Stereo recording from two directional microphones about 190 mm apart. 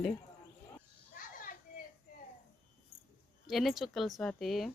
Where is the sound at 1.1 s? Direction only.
45° left (ahead or behind).